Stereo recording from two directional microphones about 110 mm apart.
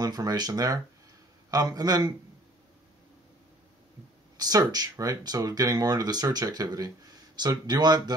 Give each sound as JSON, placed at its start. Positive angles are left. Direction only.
{"t": 0.0, "sound": "speech", "side_deg": -35}
{"t": 4.4, "sound": "speech", "side_deg": -35}